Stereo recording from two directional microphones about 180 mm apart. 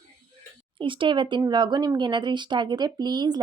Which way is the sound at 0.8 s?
30° right (ahead or behind).